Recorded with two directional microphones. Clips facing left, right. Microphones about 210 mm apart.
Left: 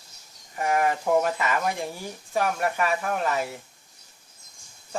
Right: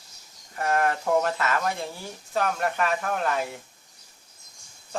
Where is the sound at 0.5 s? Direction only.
10° left (ahead or behind).